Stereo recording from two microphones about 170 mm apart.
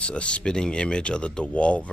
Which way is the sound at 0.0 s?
5° left (ahead or behind).